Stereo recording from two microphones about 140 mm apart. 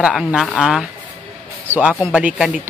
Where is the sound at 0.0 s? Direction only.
Centre (ahead or behind).